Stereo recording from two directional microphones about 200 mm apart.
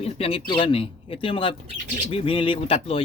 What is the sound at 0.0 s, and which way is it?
Speech, 30° left (ahead or behind).